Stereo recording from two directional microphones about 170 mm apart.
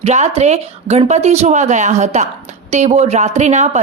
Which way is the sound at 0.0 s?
40° right (ahead or behind).